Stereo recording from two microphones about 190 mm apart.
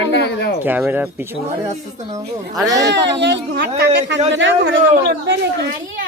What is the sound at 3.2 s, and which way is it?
A man's voice, 65° right (ahead or behind).